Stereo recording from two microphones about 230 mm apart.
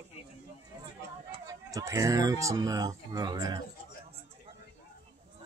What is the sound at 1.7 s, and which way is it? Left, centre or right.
Speech, centre.